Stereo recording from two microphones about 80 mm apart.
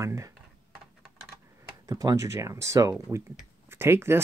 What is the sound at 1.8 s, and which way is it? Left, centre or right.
Speech, right.